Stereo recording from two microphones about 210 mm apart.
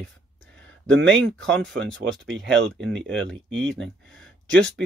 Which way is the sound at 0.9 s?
55° right (ahead or behind).